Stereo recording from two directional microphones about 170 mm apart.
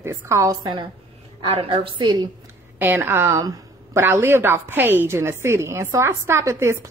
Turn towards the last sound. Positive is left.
turn(degrees=-15)  # may be behind; listen again after turning